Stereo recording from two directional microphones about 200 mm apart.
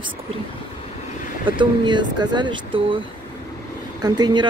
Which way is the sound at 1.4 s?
25° right (ahead or behind).